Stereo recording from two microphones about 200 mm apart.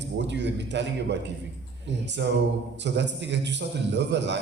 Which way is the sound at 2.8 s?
60° right (ahead or behind).